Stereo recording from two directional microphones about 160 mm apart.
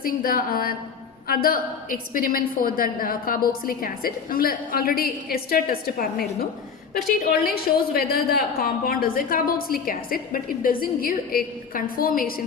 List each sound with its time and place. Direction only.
0.0 s a woman's voice: 65° left (ahead or behind)
7.4 s a woman's voice: 70° left (ahead or behind)